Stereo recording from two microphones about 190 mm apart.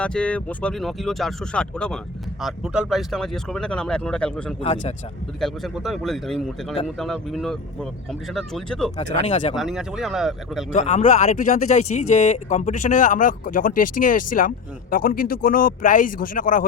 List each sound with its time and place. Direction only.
0.0 s speech: 5° left (ahead or behind)
4.6 s speech: 35° left (ahead or behind)
5.4 s speech: centre (ahead or behind)
9.2 s speech: 35° left (ahead or behind)
9.6 s speech: centre (ahead or behind)
10.7 s speech: 40° left (ahead or behind)